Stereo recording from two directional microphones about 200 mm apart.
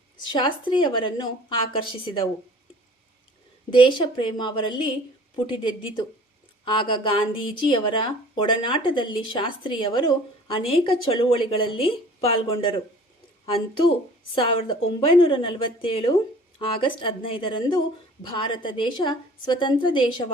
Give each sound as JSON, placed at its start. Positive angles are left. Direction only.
{"t": 0.3, "sound": "speech", "side_deg": 25}
{"t": 3.7, "sound": "speech", "side_deg": 25}
{"t": 14.3, "sound": "speech", "side_deg": 25}